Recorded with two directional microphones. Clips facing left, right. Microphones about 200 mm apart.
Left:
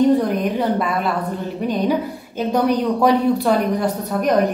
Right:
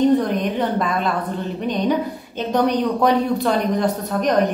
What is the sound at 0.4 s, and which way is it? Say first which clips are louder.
Speech: left 1 dB; 5° left (ahead or behind).